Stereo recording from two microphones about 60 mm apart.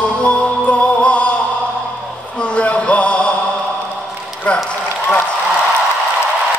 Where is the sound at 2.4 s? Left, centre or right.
Centre.